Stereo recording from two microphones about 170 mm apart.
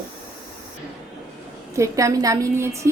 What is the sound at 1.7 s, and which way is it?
A woman's voice, 20° right (ahead or behind).